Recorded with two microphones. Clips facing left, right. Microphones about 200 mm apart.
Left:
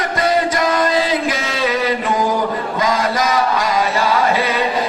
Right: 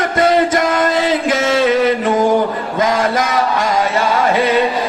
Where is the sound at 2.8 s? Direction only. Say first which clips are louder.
Right 3 dB; 50° right (ahead or behind).